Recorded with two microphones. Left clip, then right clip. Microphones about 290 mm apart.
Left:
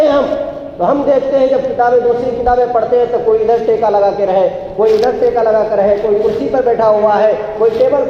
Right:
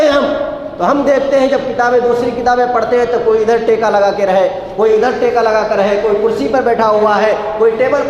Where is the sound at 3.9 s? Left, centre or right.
Right.